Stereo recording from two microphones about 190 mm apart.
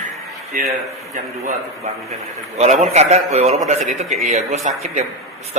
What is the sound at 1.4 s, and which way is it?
A man's voice, 35° right (ahead or behind).